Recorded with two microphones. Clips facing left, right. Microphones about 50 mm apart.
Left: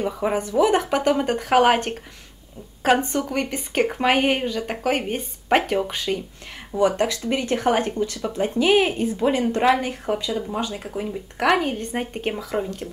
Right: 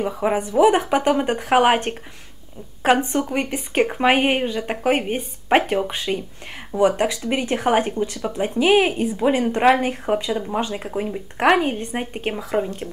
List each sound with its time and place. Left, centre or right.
0.0 s speech: centre